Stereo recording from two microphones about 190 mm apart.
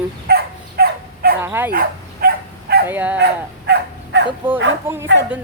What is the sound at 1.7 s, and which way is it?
Dog, 50° right (ahead or behind).